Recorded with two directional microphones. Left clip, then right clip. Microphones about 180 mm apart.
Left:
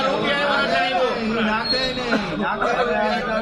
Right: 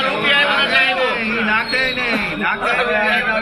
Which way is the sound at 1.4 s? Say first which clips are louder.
Right 4 dB; 20° left (ahead or behind).